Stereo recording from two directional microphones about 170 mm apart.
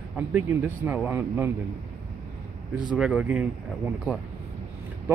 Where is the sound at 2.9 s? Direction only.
5° right (ahead or behind).